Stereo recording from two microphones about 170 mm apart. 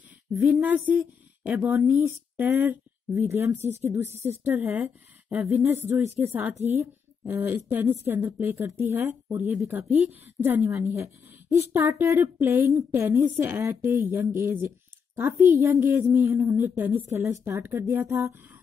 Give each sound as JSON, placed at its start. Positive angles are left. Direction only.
{"t": 0.3, "sound": "a woman's voice", "side_deg": -10}